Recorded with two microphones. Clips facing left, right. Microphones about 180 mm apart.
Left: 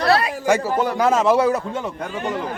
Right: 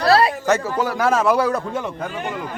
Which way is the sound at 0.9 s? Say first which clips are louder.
Left 1 dB; 20° left (ahead or behind).